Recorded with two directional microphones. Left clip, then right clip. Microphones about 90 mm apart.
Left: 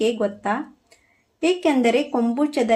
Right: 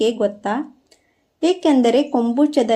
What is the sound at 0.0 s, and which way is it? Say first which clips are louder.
Speech: right 3 dB; 30° right (ahead or behind).